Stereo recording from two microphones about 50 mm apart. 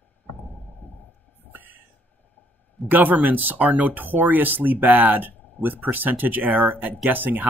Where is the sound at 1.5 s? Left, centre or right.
Right.